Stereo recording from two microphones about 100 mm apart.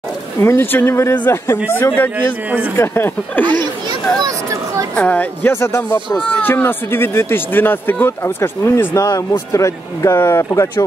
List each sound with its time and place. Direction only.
0.4 s speech: 25° left (ahead or behind)
4.9 s speech: 15° left (ahead or behind); by 10.9 s 30° left (ahead or behind)